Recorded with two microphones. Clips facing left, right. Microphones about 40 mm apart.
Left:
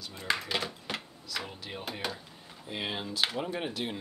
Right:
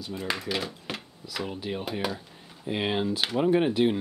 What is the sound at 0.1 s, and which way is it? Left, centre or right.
Speech, centre.